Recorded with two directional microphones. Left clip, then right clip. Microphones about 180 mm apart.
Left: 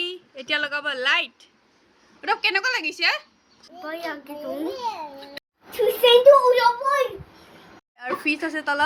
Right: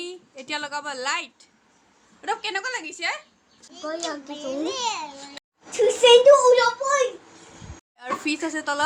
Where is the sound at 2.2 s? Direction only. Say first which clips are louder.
Left 5 dB; 15° left (ahead or behind).